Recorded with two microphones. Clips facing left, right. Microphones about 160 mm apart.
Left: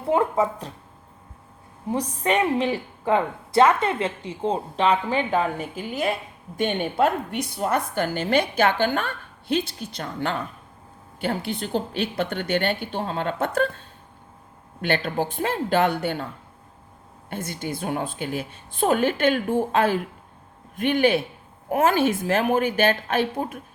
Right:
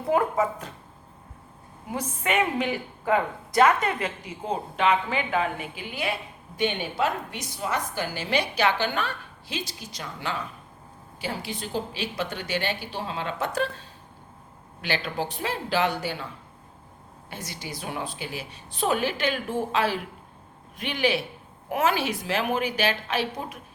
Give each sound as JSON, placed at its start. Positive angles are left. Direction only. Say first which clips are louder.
{"t": 0.1, "sound": "a woman's voice", "louder": "left 2 dB", "side_deg": 30}
{"t": 1.9, "sound": "a woman's voice", "louder": "left 5 dB", "side_deg": 35}
{"t": 14.8, "sound": "a woman's voice", "louder": "left 5 dB", "side_deg": 55}
{"t": 17.2, "sound": "a woman's voice", "louder": "left 7 dB", "side_deg": 55}